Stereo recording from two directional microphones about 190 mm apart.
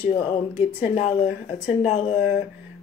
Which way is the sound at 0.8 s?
40° left (ahead or behind).